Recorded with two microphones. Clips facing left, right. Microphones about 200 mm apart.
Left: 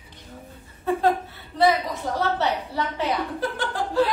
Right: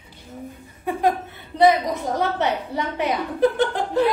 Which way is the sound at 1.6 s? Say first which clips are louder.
Right 4 dB; 20° right (ahead or behind).